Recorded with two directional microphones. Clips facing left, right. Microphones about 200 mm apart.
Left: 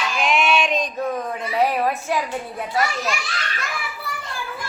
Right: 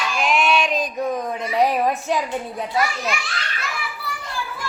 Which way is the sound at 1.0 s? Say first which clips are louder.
Right 1 dB; 15° right (ahead or behind).